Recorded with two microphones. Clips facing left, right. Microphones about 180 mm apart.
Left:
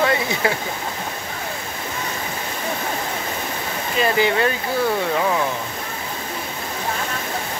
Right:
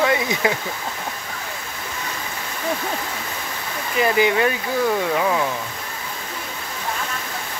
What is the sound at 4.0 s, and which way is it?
Speech, 15° right (ahead or behind).